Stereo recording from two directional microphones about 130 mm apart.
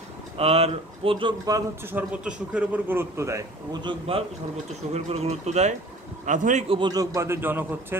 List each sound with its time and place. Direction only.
0.4 s speech: 50° right (ahead or behind)
1.4 s a man's voice: 30° right (ahead or behind)
1.9 s a man's voice: 10° right (ahead or behind)
4.1 s speech: 45° right (ahead or behind)
6.2 s speech: 75° right (ahead or behind)
6.7 s a man's voice: 35° right (ahead or behind); by 8.0 s 15° right (ahead or behind)